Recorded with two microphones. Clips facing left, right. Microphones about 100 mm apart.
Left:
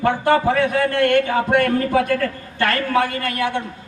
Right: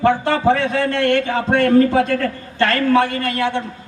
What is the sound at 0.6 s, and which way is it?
A man's voice, 25° right (ahead or behind).